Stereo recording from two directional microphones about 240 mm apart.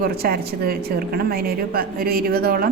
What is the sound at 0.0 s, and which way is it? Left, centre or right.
A woman's voice, right.